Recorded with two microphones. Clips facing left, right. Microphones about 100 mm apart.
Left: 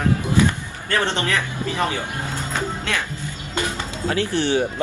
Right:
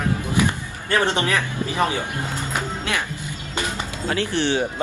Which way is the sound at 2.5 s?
15° right (ahead or behind).